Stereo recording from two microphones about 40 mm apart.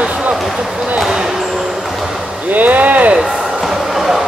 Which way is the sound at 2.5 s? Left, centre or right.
Right.